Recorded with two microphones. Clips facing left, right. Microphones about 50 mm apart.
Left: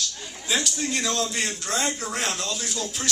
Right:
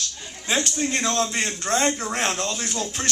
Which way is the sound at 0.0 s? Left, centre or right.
Right.